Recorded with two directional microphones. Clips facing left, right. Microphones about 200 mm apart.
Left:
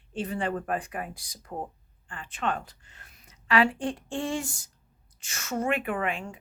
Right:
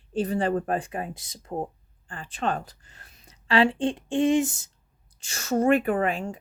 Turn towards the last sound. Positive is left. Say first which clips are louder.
# right 5 dB
turn(degrees=-40)  # may be behind; listen again after turning